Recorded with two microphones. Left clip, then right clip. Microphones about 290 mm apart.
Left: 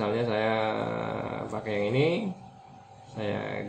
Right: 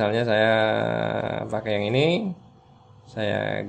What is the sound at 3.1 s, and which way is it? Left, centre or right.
Speech, right.